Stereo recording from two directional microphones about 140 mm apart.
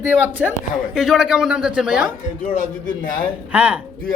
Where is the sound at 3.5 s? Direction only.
10° right (ahead or behind).